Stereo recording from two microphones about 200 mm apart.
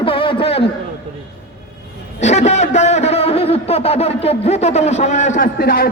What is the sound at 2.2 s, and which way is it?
A man's voice, 35° left (ahead or behind).